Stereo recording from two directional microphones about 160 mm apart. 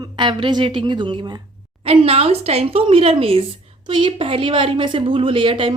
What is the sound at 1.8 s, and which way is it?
A woman's voice, 40° right (ahead or behind).